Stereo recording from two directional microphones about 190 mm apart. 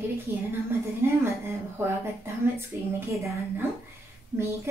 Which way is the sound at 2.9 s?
15° right (ahead or behind).